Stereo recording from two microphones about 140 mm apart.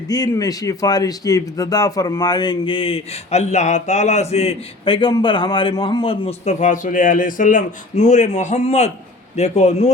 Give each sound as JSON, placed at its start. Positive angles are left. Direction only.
{"t": 0.1, "sound": "speech", "side_deg": 25}
{"t": 6.4, "sound": "a man's voice", "side_deg": 60}